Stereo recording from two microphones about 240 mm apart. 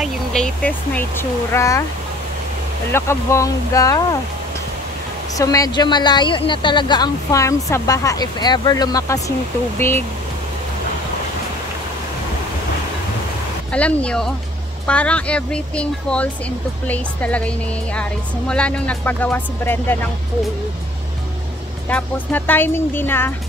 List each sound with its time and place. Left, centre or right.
0.0 s speech: centre
2.9 s speech: centre
5.3 s speech: centre
13.7 s speech: centre
21.8 s speech: centre